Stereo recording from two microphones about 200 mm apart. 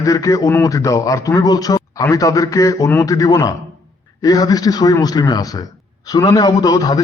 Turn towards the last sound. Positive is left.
turn(degrees=20)  # may be behind; listen again after turning